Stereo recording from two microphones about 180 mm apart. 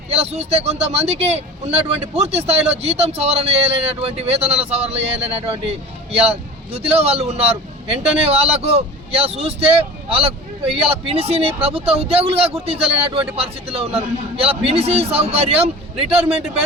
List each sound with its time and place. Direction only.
0.1 s speech: 35° right (ahead or behind)